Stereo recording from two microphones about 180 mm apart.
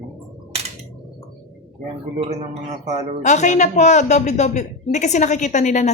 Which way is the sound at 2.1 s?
35° right (ahead or behind).